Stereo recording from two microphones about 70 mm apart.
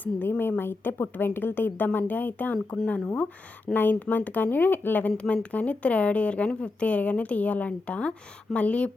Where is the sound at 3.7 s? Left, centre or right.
Left.